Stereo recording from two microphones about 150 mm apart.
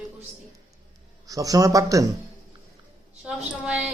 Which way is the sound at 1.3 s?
25° right (ahead or behind).